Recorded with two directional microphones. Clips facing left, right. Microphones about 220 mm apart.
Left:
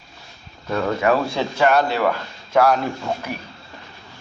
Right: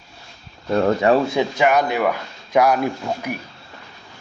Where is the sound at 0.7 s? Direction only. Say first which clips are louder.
Right 3 dB; 35° right (ahead or behind).